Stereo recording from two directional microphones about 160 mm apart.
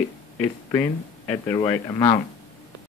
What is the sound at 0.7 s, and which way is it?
Speech, 15° left (ahead or behind).